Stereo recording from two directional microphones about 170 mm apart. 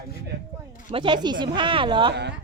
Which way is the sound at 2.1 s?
90° right.